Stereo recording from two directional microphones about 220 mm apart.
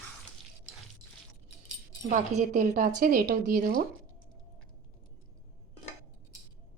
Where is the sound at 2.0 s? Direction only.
35° right (ahead or behind).